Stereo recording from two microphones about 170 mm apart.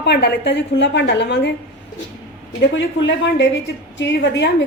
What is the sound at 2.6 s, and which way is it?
A woman's voice, 90° left.